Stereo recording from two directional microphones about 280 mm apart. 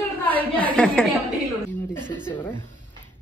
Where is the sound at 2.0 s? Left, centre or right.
Centre.